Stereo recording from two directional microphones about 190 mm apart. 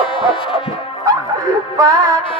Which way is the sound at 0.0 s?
30° left (ahead or behind).